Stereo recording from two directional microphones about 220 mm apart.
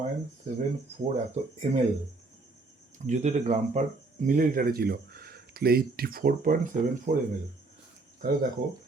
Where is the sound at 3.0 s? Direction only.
30° right (ahead or behind).